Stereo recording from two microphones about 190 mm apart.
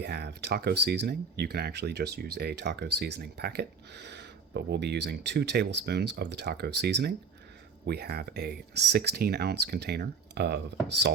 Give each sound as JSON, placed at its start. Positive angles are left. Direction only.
{"t": 0.0, "sound": "speech", "side_deg": -60}